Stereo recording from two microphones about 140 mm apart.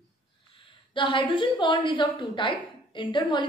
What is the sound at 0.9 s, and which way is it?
A woman's voice, 35° left (ahead or behind).